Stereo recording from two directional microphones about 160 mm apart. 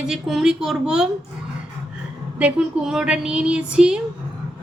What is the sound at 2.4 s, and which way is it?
A woman's voice, 5° right (ahead or behind).